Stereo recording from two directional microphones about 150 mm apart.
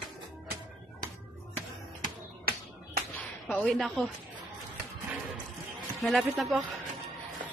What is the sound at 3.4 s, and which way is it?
Speech, centre (ahead or behind).